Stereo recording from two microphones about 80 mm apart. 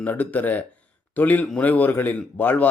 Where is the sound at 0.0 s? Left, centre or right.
Centre.